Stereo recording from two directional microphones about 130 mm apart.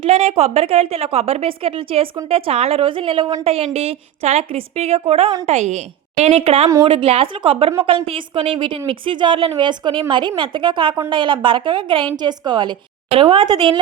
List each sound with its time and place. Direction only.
0.0 s a woman's voice: 55° right (ahead or behind)
5.5 s a woman's voice: 60° right (ahead or behind); by 12.7 s 35° right (ahead or behind)
13.1 s a woman's voice: 45° right (ahead or behind)